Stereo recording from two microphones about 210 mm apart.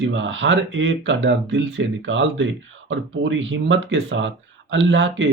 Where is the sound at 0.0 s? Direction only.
65° right (ahead or behind).